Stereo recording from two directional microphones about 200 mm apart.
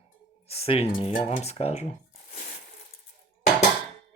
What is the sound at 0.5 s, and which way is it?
Speech, 30° left (ahead or behind).